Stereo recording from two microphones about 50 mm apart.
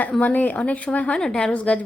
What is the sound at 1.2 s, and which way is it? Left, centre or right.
Speech, centre.